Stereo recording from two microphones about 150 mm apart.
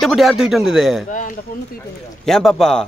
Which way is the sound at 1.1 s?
60° left (ahead or behind).